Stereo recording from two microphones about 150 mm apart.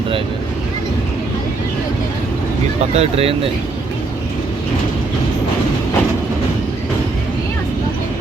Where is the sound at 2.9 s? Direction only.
40° right (ahead or behind).